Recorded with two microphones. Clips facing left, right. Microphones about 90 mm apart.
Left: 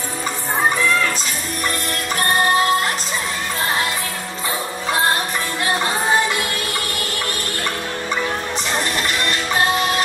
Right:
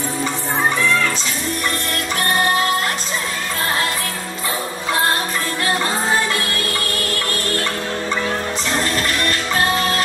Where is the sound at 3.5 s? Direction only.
20° left (ahead or behind).